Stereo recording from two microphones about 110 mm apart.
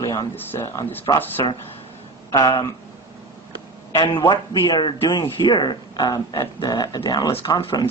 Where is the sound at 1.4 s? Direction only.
40° left (ahead or behind).